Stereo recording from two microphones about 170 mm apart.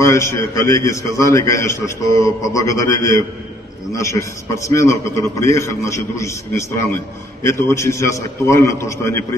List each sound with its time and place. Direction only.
0.0 s a man's voice: 15° left (ahead or behind)